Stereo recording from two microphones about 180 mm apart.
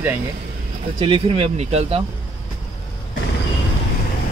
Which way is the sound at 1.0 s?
30° right (ahead or behind).